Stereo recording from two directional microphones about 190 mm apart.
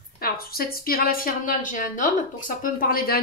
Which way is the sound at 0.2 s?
50° left (ahead or behind).